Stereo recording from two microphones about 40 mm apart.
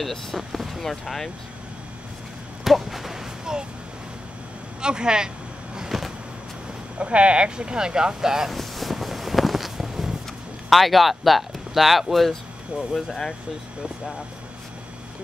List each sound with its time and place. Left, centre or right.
0.0 s speech: centre
2.6 s speech: centre
3.5 s speech: centre
4.8 s speech: right
5.9 s vehicle: centre
7.0 s speech: right; by 8.5 s centre
8.5 s a sound: centre
10.7 s speech: centre